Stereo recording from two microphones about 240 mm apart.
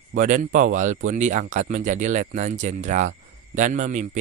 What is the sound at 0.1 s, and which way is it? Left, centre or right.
Speech, right.